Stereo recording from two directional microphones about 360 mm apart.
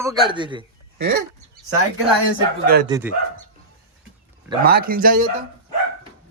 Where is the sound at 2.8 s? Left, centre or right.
Centre.